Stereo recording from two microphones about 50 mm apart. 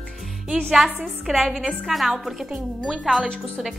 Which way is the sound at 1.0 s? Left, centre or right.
Centre.